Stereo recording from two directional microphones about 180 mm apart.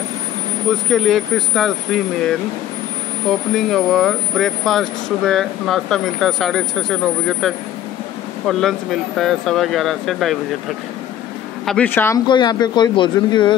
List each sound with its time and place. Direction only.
0.7 s speech: centre (ahead or behind)
11.6 s speech: 5° left (ahead or behind)
12.3 s speech: 25° left (ahead or behind)